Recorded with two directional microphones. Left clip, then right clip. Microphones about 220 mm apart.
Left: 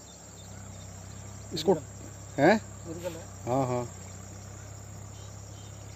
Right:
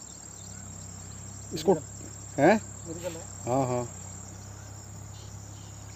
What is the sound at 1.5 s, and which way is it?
Speech, 5° right (ahead or behind).